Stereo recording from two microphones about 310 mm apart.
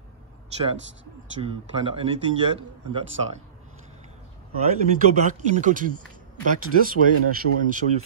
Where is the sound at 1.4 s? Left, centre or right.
Centre.